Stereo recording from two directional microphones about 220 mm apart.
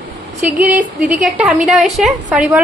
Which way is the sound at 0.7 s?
5° right (ahead or behind).